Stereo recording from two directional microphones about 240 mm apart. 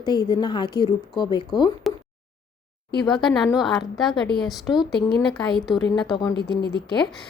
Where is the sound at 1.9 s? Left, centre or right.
Centre.